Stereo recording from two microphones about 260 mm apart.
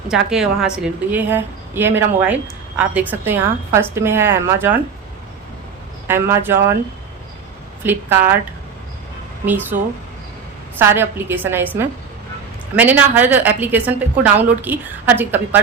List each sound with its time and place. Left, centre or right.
0.1 s a woman's voice: centre
6.1 s a woman's voice: centre
7.9 s a woman's voice: centre
9.5 s a woman's voice: centre
10.8 s a woman's voice: centre